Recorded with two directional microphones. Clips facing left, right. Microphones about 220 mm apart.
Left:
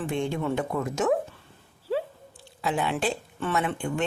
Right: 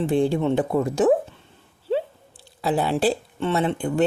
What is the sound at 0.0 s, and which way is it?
Speech, 35° right (ahead or behind).